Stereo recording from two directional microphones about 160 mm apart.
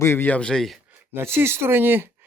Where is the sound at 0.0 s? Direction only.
15° left (ahead or behind).